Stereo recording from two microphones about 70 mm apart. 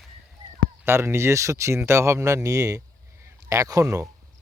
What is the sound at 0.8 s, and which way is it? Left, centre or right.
Speech, right.